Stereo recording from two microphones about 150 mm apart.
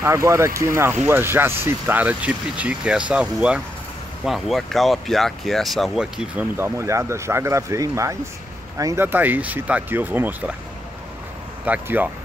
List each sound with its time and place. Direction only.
0.0 s speech: 20° right (ahead or behind)
11.6 s speech: 10° right (ahead or behind)